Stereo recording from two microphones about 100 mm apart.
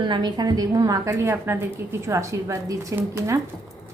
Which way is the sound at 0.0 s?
50° right (ahead or behind).